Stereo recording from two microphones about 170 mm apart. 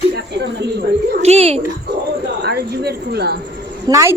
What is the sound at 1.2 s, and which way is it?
Speech, 40° right (ahead or behind).